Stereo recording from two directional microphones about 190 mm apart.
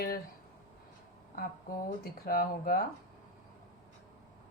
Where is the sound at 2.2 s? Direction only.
50° left (ahead or behind).